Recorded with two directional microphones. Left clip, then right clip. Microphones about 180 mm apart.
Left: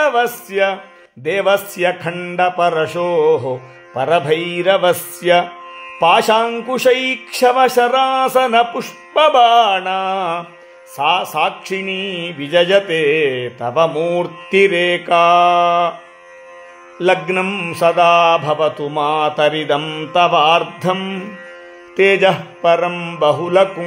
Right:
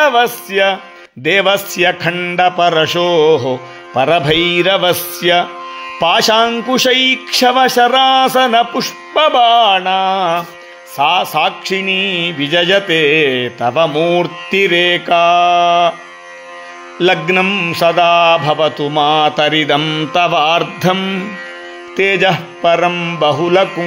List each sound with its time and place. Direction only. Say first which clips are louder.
0.0 s mantra: right 4 dB; 10° right (ahead or behind)
1.2 s mantra: right 3 dB; 25° right (ahead or behind)
3.9 s mantra: right 3 dB; 30° right (ahead or behind); by 15.9 s 10° right (ahead or behind)
17.0 s mantra: right 3 dB; 20° right (ahead or behind)